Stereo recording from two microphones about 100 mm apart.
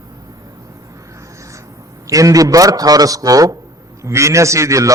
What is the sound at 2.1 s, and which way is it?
A man's voice, 35° right (ahead or behind).